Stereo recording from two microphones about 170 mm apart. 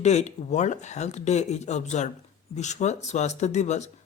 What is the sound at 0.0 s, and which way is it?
Speech, 40° left (ahead or behind).